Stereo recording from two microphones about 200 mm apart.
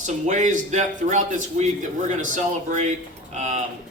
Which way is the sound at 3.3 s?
35° right (ahead or behind).